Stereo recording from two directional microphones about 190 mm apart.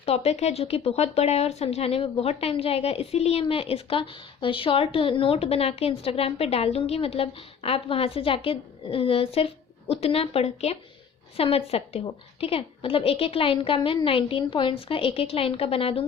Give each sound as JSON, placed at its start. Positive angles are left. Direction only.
{"t": 0.0, "sound": "a woman's voice", "side_deg": 35}